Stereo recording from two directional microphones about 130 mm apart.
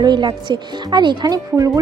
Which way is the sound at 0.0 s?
35° right (ahead or behind).